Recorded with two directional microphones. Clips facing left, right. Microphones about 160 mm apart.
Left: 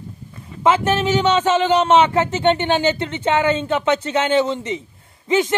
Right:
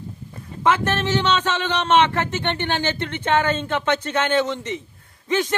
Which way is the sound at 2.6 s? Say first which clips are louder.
Left 5 dB; 15° left (ahead or behind).